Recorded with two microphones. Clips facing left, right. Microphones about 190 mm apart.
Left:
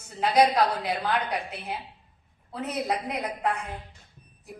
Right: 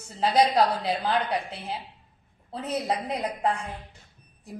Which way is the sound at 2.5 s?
30° right (ahead or behind).